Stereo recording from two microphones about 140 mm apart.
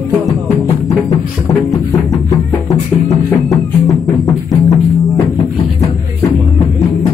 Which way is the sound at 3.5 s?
25° left (ahead or behind).